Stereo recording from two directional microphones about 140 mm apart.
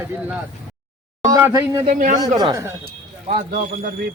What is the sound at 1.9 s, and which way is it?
Speech, 70° right (ahead or behind).